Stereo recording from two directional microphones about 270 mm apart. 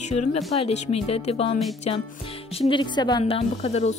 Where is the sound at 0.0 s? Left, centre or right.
Left.